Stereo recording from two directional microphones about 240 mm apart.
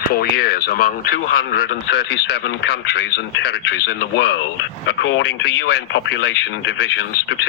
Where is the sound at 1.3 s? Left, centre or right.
Left.